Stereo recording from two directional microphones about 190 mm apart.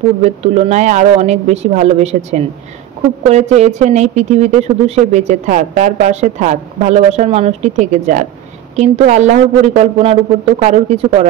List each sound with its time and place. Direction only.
0.2 s speech: 35° right (ahead or behind)